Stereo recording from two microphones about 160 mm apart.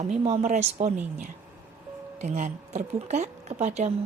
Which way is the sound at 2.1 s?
45° right (ahead or behind).